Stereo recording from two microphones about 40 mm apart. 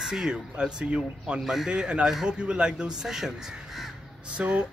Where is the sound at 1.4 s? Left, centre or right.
Centre.